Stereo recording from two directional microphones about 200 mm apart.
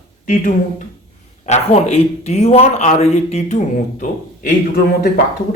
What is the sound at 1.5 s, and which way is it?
Speech, 30° left (ahead or behind).